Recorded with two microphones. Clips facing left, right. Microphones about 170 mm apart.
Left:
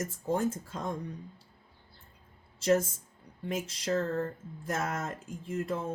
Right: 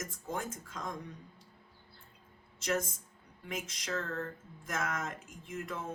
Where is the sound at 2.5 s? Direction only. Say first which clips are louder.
Left 8 dB; 30° left (ahead or behind).